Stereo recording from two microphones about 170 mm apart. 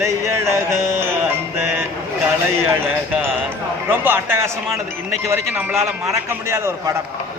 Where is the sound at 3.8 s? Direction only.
10° right (ahead or behind).